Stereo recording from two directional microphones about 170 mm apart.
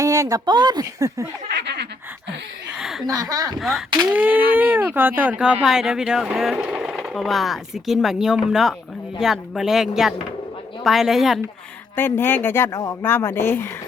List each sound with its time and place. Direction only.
0.0 s speech: 20° right (ahead or behind)
1.5 s snicker: 80° right
2.7 s a sound: centre (ahead or behind)
3.2 s speech: 20° right (ahead or behind)
3.6 s speech: centre (ahead or behind)
11.9 s speech: 10° left (ahead or behind)